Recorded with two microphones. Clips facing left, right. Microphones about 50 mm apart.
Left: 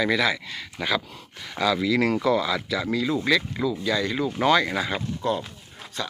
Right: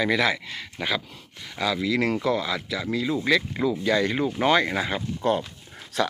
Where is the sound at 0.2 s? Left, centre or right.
Right.